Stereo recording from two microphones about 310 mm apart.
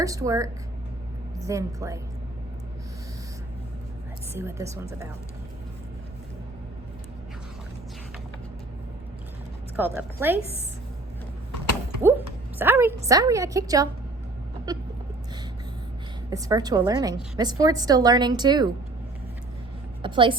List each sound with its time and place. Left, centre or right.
0.0 s a woman's voice: centre
4.4 s a woman's voice: centre
9.7 s a woman's voice: centre
12.0 s a woman's voice: centre
16.3 s a woman's voice: centre
20.0 s a woman's voice: centre